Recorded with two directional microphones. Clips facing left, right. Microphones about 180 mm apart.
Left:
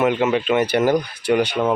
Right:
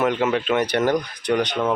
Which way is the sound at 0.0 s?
5° left (ahead or behind).